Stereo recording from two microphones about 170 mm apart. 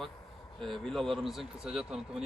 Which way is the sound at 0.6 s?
Centre (ahead or behind).